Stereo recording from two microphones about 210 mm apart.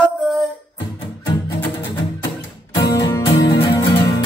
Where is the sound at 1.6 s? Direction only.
10° left (ahead or behind).